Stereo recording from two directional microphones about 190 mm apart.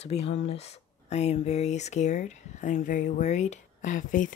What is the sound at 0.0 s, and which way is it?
Speech, 35° left (ahead or behind).